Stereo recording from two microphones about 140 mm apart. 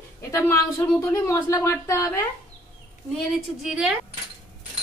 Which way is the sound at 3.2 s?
5° right (ahead or behind).